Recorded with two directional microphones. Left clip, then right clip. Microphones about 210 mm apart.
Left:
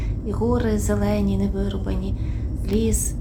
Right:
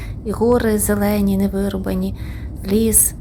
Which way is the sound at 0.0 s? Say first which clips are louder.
Right 7 dB; 35° right (ahead or behind).